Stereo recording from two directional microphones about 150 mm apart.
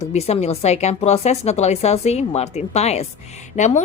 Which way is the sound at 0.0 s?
45° left (ahead or behind).